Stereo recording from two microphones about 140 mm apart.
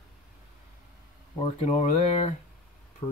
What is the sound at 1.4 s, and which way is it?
Speech, 55° left (ahead or behind).